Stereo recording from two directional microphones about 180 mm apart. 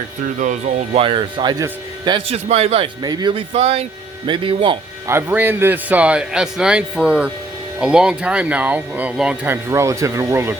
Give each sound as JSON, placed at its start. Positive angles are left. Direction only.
{"t": 0.9, "sound": "a man's voice", "side_deg": -30}
{"t": 5.0, "sound": "speech", "side_deg": -10}